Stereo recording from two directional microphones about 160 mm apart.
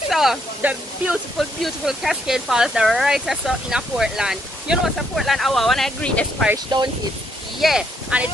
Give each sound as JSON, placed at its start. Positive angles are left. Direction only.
{"t": 0.1, "sound": "speech", "side_deg": 0}
{"t": 6.7, "sound": "speech", "side_deg": -25}
{"t": 7.6, "sound": "speech", "side_deg": -5}